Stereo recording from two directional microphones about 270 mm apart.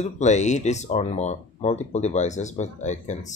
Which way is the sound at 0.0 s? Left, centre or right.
Left.